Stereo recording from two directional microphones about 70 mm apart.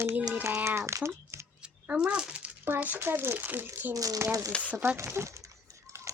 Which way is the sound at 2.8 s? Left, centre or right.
Right.